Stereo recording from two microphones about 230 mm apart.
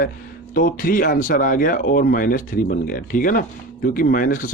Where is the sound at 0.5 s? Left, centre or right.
Left.